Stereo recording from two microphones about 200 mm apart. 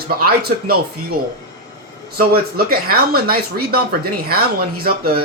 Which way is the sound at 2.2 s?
50° right (ahead or behind).